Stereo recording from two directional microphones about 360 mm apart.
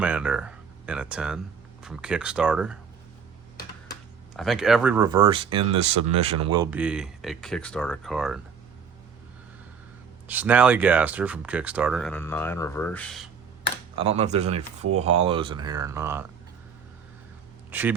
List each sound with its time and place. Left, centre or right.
0.0 s speech: centre
4.4 s speech: centre
10.2 s speech: centre
13.9 s speech: centre
17.7 s speech: centre